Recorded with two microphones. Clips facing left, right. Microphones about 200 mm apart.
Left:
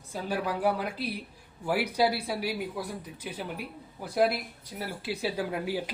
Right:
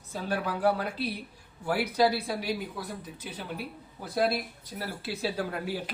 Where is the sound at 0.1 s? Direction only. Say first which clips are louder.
Even; 10° left (ahead or behind).